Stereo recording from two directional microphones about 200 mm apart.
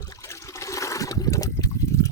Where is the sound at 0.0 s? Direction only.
15° left (ahead or behind).